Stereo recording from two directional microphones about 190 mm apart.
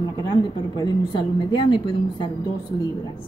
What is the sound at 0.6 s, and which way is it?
A woman's voice, 25° left (ahead or behind).